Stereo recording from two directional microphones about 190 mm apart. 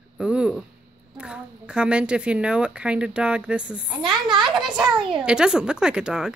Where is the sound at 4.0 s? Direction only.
25° right (ahead or behind).